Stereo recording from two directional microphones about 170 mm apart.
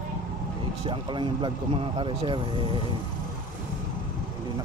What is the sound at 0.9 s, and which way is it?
Speech, 30° right (ahead or behind).